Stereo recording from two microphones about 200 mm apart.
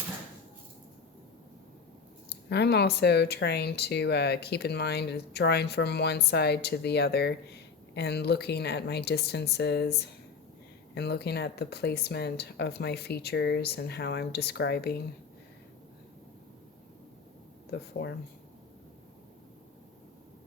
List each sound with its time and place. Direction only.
2.5 s speech: 55° left (ahead or behind)
17.7 s speech: 55° left (ahead or behind)